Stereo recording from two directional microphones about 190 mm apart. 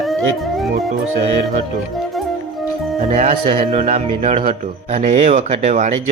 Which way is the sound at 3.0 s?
30° right (ahead or behind).